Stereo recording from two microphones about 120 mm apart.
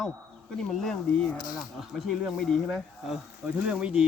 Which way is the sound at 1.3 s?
35° left (ahead or behind).